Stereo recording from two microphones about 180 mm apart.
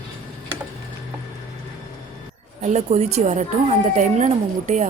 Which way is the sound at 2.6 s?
40° right (ahead or behind).